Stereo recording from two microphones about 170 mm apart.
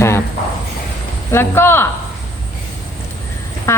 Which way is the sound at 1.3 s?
15° left (ahead or behind).